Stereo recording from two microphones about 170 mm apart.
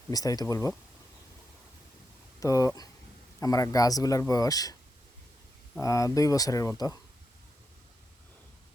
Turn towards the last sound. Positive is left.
turn(degrees=20)  # may be behind; listen again after turning